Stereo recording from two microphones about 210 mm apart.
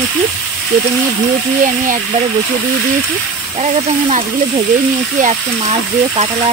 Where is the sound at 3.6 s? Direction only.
35° right (ahead or behind).